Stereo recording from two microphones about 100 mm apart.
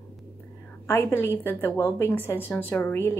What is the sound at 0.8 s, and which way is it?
A woman's voice, 25° left (ahead or behind).